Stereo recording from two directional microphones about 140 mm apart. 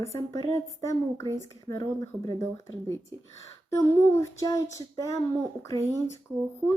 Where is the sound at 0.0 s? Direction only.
20° left (ahead or behind).